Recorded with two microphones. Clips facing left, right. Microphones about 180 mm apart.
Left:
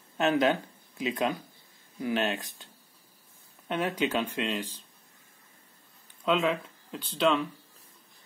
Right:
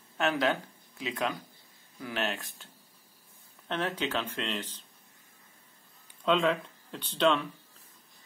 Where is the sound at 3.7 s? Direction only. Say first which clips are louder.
Left 3 dB; 15° left (ahead or behind).